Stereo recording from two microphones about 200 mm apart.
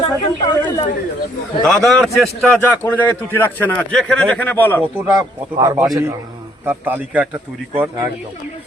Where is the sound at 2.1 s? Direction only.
Centre (ahead or behind).